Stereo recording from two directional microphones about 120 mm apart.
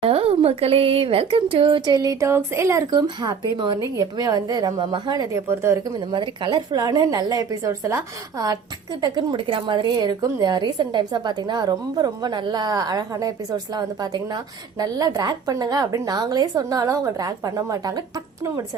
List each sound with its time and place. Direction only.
0.0 s speech: 55° right (ahead or behind); by 3.0 s 25° right (ahead or behind)
3.2 s a woman's voice: 40° right (ahead or behind)
5.3 s speech: 25° right (ahead or behind)
6.1 s a woman's voice: 40° right (ahead or behind)